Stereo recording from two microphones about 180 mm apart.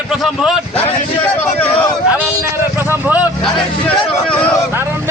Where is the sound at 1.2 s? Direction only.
10° left (ahead or behind).